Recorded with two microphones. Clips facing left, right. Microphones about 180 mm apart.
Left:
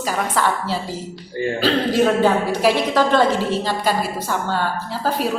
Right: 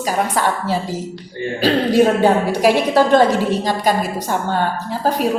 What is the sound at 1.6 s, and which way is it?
A woman's voice, 15° right (ahead or behind).